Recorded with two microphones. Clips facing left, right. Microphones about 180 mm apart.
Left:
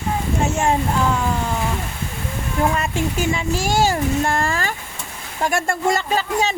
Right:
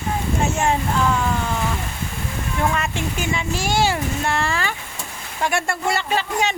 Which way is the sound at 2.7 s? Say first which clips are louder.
Left 3 dB; 40° left (ahead or behind).